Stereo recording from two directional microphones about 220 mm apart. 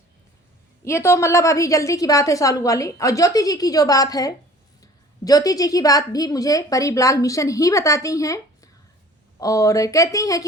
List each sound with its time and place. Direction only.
0.9 s a woman's voice: 10° left (ahead or behind)